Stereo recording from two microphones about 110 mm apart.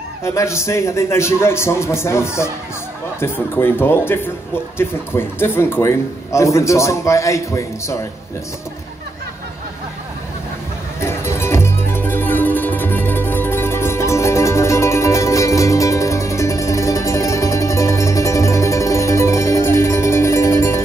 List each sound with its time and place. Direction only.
0.2 s a man's voice: 25° left (ahead or behind)
11.0 s music: 25° left (ahead or behind)